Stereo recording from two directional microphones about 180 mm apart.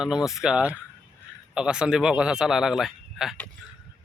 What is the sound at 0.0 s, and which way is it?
A man's voice, 5° right (ahead or behind).